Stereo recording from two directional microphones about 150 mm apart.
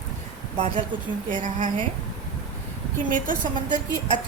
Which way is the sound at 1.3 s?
55° right (ahead or behind).